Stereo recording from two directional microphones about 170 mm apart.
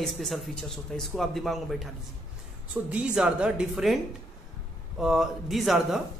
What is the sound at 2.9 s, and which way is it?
A man's voice, 5° right (ahead or behind).